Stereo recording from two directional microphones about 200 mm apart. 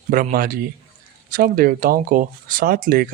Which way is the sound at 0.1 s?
45° right (ahead or behind).